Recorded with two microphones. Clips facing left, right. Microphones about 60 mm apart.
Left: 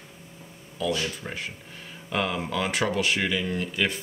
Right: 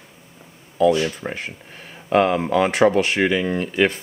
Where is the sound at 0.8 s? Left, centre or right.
Right.